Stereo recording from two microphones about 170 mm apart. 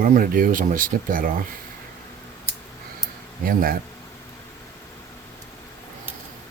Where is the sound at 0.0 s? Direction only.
55° right (ahead or behind).